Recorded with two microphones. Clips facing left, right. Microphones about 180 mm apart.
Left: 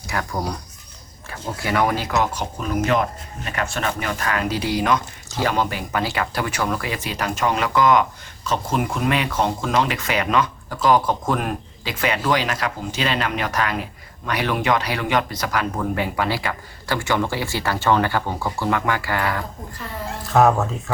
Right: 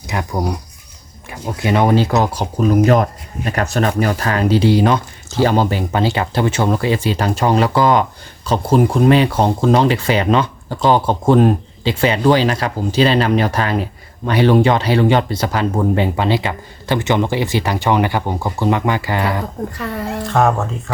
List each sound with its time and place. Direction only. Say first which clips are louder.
0.1 s speech: right 5 dB; 20° right (ahead or behind)
19.8 s a woman's voice: right 6 dB; 70° right (ahead or behind)
20.2 s speech: even; centre (ahead or behind)